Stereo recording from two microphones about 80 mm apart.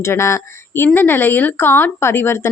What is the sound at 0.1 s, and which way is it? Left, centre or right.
Speech, left.